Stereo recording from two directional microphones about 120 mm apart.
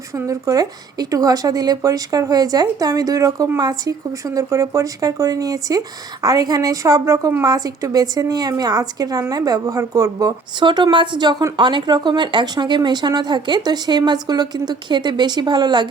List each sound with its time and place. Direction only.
0.3 s a woman's voice: 30° right (ahead or behind)
10.6 s a woman's voice: 40° right (ahead or behind)